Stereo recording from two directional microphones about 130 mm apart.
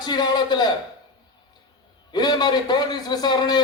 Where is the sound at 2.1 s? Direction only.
35° left (ahead or behind).